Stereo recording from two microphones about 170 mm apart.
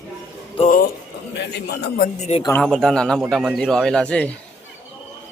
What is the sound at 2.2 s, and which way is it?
Speech, 40° left (ahead or behind).